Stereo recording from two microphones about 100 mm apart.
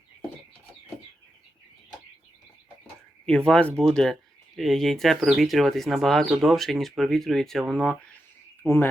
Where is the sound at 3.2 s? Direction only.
5° left (ahead or behind).